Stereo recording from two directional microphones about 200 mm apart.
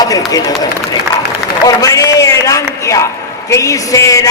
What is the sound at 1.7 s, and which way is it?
A man's voice, 15° left (ahead or behind).